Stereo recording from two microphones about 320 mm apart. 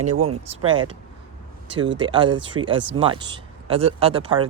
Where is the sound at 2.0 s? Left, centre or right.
Centre.